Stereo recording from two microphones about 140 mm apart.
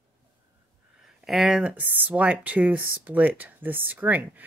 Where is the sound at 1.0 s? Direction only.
5° right (ahead or behind).